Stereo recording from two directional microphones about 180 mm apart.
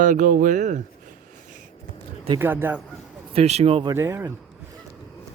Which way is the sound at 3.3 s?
35° right (ahead or behind).